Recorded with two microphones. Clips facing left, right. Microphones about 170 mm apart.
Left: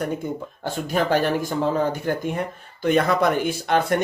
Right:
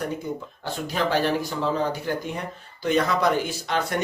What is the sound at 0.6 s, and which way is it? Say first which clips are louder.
Speech: left 3 dB; 50° left (ahead or behind).